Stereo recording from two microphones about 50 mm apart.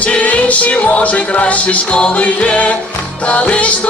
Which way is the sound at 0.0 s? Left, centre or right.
Left.